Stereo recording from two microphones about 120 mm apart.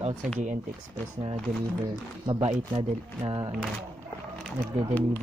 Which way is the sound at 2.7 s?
50° right (ahead or behind).